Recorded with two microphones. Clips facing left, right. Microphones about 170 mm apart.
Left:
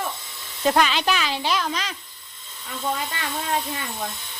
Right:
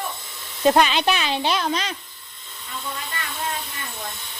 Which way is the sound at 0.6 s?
20° right (ahead or behind).